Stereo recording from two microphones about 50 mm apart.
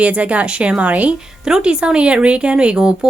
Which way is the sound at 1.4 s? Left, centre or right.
Centre.